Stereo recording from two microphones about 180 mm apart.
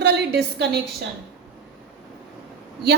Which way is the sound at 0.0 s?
65° right (ahead or behind).